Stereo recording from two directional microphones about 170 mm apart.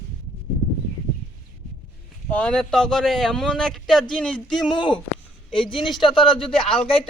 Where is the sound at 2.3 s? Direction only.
5° left (ahead or behind).